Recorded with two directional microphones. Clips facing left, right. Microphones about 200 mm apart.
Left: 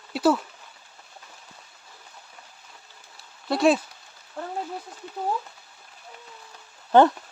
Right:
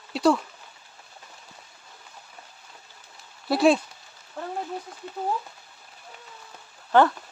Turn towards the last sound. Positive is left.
turn(degrees=20)  # may be behind; listen again after turning